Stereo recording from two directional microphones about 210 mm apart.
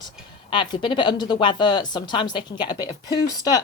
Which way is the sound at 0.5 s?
20° left (ahead or behind).